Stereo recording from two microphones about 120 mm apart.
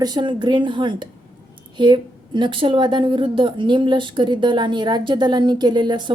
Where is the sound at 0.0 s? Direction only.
35° right (ahead or behind).